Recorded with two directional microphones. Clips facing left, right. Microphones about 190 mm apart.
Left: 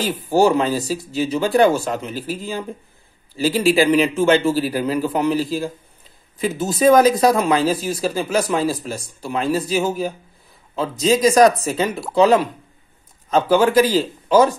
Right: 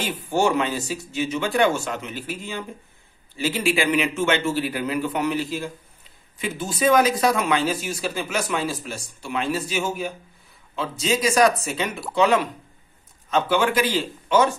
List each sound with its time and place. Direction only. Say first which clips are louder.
0.0 s speech: left 6 dB; 35° left (ahead or behind)